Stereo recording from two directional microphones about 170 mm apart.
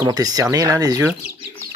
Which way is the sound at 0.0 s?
20° right (ahead or behind).